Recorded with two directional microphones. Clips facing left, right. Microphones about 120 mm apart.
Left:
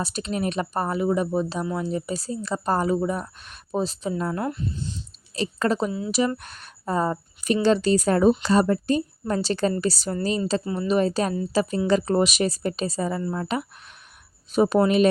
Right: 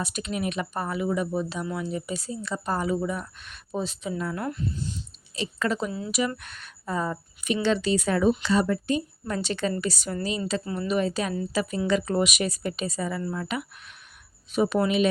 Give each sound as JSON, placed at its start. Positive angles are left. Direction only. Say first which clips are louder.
{"t": 0.0, "sound": "a woman's voice", "louder": "left 3 dB", "side_deg": 35}